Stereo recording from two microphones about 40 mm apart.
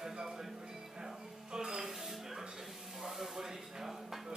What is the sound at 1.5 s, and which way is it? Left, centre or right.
Music, centre.